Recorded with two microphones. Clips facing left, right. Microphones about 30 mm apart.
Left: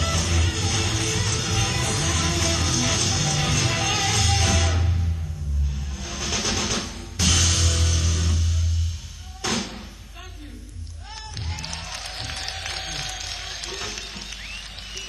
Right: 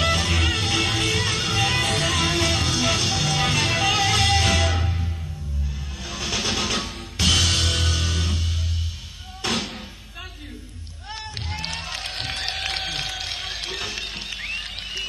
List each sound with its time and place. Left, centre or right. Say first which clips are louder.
0.0 s music: right 4 dB; right
0.4 s music: right 4 dB; right
0.8 s music: right 4 dB; right
2.4 s music: right 2 dB; right
3.7 s music: right 3 dB; centre
4.1 s music: right 3 dB; right
4.6 s music: right 2 dB; right
7.2 s music: right 3 dB; right
7.6 s music: right 3 dB; right
7.9 s music: right 2 dB; right
9.5 s thump: right 1 dB; right
11.5 s music: right 4 dB; right
12.0 s a sound: right 4 dB; right
13.2 s music: right 3 dB; right